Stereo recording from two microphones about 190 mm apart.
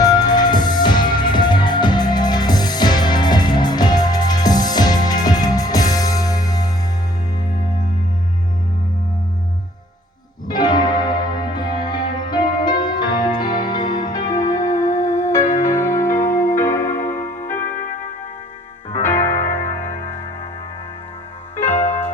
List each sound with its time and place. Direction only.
0.0 s music: 20° left (ahead or behind)
10.5 s music: 20° left (ahead or behind)
13.8 s music: 45° left (ahead or behind)
14.4 s music: 20° left (ahead or behind)
17.7 s music: 45° left (ahead or behind)
19.0 s music: 10° left (ahead or behind)
19.5 s music: 40° left (ahead or behind)
21.5 s music: 10° left (ahead or behind)